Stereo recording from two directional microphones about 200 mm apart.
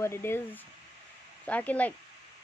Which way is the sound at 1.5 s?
5° left (ahead or behind).